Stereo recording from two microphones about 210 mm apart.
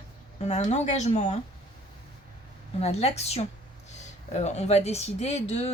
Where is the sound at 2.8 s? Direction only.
30° left (ahead or behind).